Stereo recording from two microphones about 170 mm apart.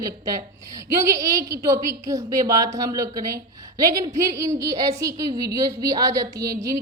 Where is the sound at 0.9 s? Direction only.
20° right (ahead or behind).